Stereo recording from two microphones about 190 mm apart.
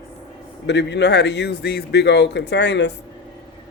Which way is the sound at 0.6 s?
65° left (ahead or behind).